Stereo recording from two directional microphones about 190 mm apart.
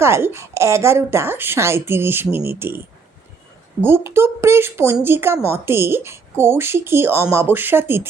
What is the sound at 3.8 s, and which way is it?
A woman's voice, 10° right (ahead or behind).